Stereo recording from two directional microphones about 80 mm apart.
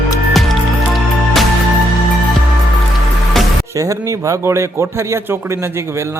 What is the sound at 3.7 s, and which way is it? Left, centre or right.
Speech, right.